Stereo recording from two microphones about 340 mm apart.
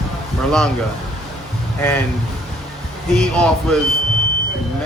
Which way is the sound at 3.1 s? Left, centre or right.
Centre.